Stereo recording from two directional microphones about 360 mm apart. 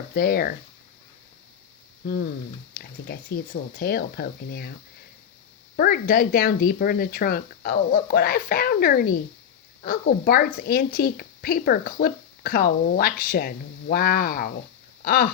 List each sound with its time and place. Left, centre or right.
0.1 s speech: left
2.7 s speech: left
5.7 s speech: left
15.0 s a sound: left